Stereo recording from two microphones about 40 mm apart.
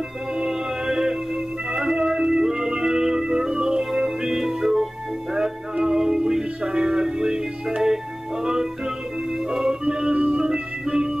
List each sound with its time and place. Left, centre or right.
0.4 s music: centre
9.5 s organ: centre
10.4 s music: centre